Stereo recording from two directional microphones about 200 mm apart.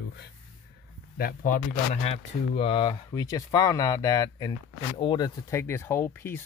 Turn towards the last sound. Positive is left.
turn(degrees=10)  # may be behind; listen again after turning